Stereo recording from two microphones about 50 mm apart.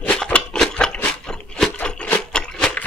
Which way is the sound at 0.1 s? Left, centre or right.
Centre.